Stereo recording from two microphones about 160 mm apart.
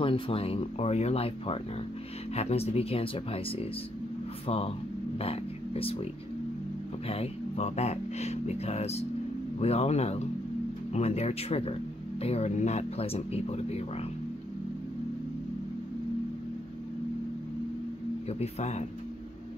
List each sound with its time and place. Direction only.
0.0 s speech: 35° left (ahead or behind)
7.1 s speech: 40° left (ahead or behind)
18.4 s speech: 45° left (ahead or behind)